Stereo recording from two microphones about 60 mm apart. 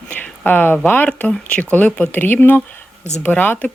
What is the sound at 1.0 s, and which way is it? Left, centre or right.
Speech, left.